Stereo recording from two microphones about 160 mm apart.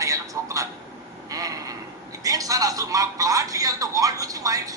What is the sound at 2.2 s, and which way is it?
Speech, 20° right (ahead or behind).